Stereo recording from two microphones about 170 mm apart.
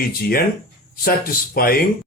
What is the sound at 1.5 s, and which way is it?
Speech, 60° left (ahead or behind).